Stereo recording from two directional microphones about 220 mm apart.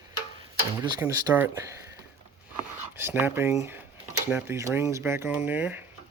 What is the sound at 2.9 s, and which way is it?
Speech, 10° right (ahead or behind).